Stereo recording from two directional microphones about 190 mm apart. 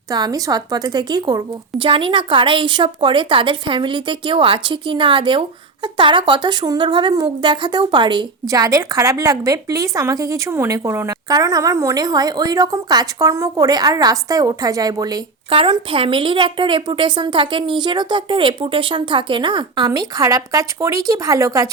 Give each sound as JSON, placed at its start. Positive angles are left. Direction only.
{"t": 0.1, "sound": "a woman's voice", "side_deg": -20}